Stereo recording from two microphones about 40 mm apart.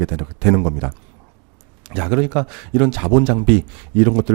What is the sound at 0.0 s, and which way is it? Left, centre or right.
Speech, right.